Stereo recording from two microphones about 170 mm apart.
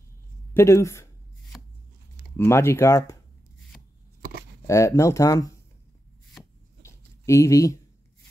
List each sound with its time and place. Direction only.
0.6 s speech: 15° left (ahead or behind)
2.3 s speech: 15° left (ahead or behind)
4.6 s speech: 15° left (ahead or behind)
6.8 s a sound: 15° left (ahead or behind)